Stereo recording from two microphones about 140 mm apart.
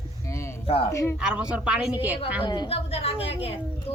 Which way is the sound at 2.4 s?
30° left (ahead or behind).